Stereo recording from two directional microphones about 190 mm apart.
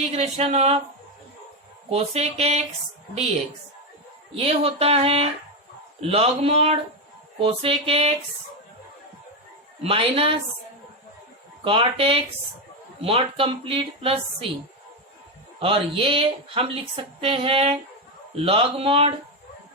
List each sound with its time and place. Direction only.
0.0 s speech: 35° right (ahead or behind)
1.9 s speech: 35° right (ahead or behind)
4.4 s speech: 30° right (ahead or behind)
9.8 s speech: 30° right (ahead or behind)
11.6 s speech: 30° right (ahead or behind)
15.6 s speech: 30° right (ahead or behind)